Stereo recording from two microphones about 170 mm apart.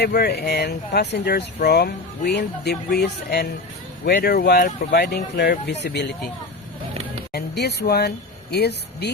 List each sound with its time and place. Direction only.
0.0 s speech: 70° left (ahead or behind)
7.3 s speech: 75° left (ahead or behind)